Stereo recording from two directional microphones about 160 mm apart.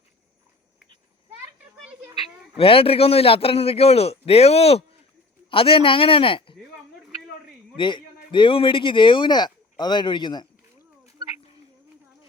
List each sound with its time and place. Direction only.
2.6 s a man's voice: 35° left (ahead or behind)
7.8 s speech: 30° left (ahead or behind)